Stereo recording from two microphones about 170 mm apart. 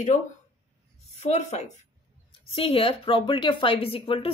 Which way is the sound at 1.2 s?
40° left (ahead or behind).